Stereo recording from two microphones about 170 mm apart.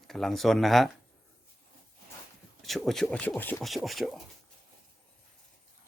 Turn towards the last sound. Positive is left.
turn(degrees=0)  # may be behind; listen again after turning